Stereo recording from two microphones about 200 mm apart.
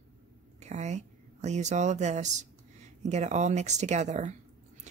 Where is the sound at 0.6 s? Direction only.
35° right (ahead or behind).